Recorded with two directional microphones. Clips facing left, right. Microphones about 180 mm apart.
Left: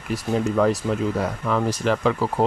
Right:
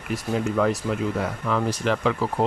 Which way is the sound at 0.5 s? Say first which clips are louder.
Left 2 dB; 35° left (ahead or behind).